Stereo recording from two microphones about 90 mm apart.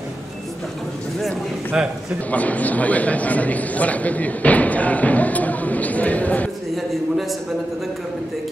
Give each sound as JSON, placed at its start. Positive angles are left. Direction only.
{"t": 2.3, "sound": "a man's voice", "side_deg": 15}